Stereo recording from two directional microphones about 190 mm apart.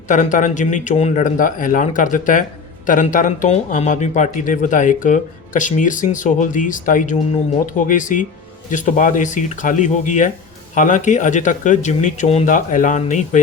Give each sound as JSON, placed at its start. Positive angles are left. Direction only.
{"t": 0.1, "sound": "a man's voice", "side_deg": 40}